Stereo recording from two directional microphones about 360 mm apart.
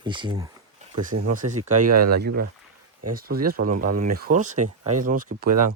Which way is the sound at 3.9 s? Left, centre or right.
Right.